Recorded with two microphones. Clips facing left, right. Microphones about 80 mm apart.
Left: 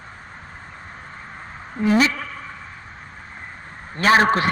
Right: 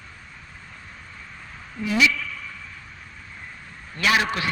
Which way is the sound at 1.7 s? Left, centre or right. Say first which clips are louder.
Left 4 dB; left.